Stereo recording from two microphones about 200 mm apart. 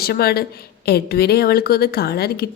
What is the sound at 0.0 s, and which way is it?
Speech, 50° left (ahead or behind).